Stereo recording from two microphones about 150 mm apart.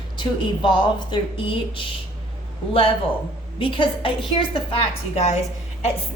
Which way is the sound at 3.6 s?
35° left (ahead or behind).